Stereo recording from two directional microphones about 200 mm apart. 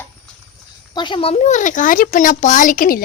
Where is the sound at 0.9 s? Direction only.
25° left (ahead or behind).